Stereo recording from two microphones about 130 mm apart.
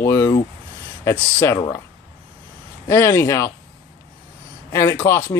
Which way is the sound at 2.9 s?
20° left (ahead or behind).